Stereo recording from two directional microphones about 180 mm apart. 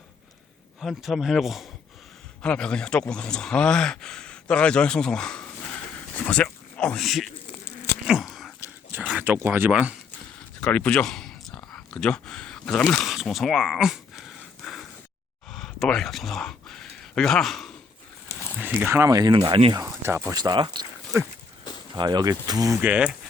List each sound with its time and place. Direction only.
0.8 s speech: centre (ahead or behind)
8.0 s a sound: centre (ahead or behind)
8.9 s speech: 10° right (ahead or behind)
10.6 s a sound: 10° left (ahead or behind)
18.5 s speech: 10° right (ahead or behind)
19.4 s speech: 30° right (ahead or behind)
19.8 s speech: 15° right (ahead or behind)
21.9 s speech: 25° right (ahead or behind); by 23.1 s 5° right (ahead or behind)